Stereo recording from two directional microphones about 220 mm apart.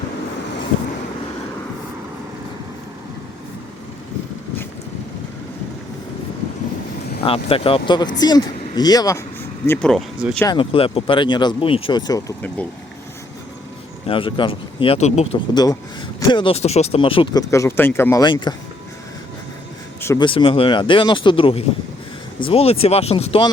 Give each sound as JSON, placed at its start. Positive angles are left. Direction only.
{"t": 7.2, "sound": "speech", "side_deg": 25}
{"t": 9.6, "sound": "speech", "side_deg": 5}
{"t": 10.4, "sound": "speech", "side_deg": 20}
{"t": 14.1, "sound": "speech", "side_deg": 25}
{"t": 20.0, "sound": "speech", "side_deg": 15}